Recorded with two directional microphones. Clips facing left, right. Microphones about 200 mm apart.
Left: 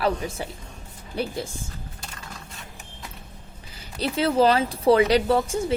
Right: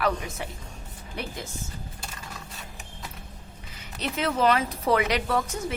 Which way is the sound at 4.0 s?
30° left (ahead or behind).